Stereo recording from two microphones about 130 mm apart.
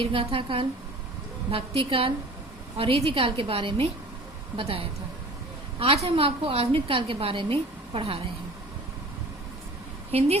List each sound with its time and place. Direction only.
0.0 s a woman's voice: 45° right (ahead or behind)
10.1 s speech: 50° right (ahead or behind)